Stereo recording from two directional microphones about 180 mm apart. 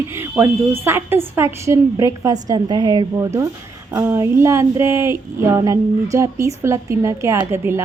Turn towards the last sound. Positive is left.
turn(degrees=-15)  # may be behind; listen again after turning